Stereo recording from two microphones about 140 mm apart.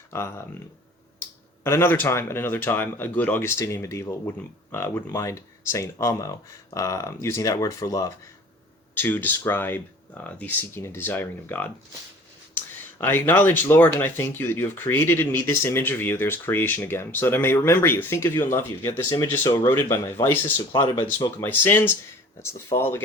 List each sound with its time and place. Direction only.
0.1 s speech: 20° left (ahead or behind)
1.6 s speech: 20° left (ahead or behind)
9.0 s speech: 15° left (ahead or behind)
20.7 s speech: 30° left (ahead or behind)
21.4 s speech: 15° left (ahead or behind)